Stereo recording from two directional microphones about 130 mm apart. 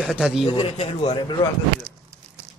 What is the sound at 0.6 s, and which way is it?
Speech, 45° left (ahead or behind).